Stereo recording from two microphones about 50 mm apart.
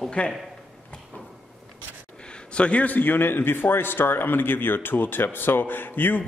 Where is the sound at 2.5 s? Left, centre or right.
Left.